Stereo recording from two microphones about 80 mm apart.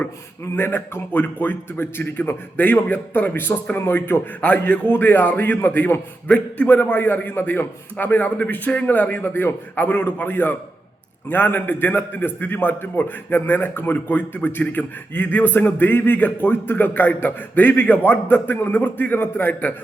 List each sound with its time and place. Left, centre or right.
0.5 s a man's voice: left